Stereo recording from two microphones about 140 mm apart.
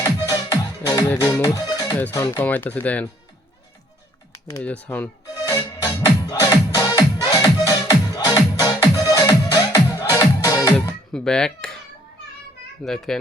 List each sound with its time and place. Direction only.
0.0 s music: 25° left (ahead or behind)
2.1 s speech: 20° left (ahead or behind)
4.6 s speech: 10° left (ahead or behind)
5.3 s music: 25° left (ahead or behind)
10.8 s music: 5° left (ahead or behind)
12.8 s a child's voice: 5° left (ahead or behind)